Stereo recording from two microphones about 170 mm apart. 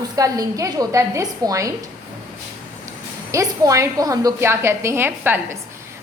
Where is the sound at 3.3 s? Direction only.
20° right (ahead or behind).